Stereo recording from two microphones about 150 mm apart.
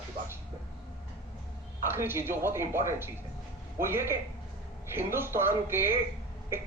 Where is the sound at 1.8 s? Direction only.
15° right (ahead or behind).